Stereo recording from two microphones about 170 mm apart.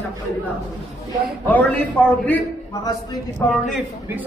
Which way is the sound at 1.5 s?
10° left (ahead or behind).